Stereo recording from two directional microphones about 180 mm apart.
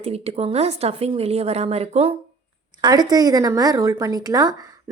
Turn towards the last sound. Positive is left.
turn(degrees=-20)  # may be behind; listen again after turning